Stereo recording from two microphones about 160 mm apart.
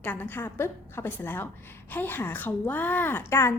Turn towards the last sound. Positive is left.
turn(degrees=15)  # may be behind; listen again after turning